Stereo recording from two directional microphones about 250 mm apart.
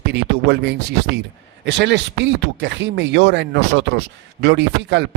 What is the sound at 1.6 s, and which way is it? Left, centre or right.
Speech, right.